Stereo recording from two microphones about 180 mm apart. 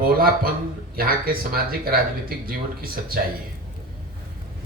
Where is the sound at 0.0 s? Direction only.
55° right (ahead or behind).